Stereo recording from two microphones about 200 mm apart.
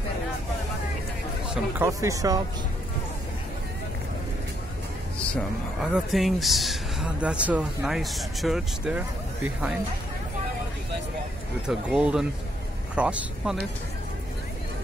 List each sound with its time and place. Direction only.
1.5 s speech: 15° right (ahead or behind)
5.3 s speech: 5° right (ahead or behind)
11.6 s speech: 5° right (ahead or behind)